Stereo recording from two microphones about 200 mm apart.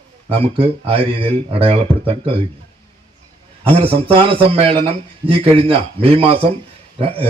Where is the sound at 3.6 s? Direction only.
30° right (ahead or behind).